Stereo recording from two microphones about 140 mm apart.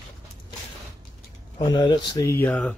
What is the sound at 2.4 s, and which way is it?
Speech, 10° left (ahead or behind).